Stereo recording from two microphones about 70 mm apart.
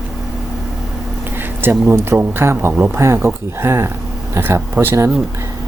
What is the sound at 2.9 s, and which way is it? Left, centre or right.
Speech, right.